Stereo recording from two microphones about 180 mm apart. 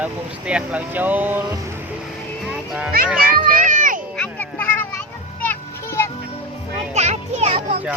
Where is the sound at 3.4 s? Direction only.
45° right (ahead or behind).